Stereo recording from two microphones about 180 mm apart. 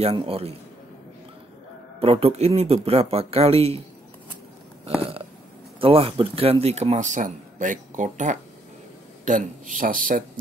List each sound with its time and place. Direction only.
0.0 s speech: 30° right (ahead or behind)
2.0 s speech: 35° right (ahead or behind)
5.8 s speech: 30° right (ahead or behind); by 10.2 s 50° right (ahead or behind)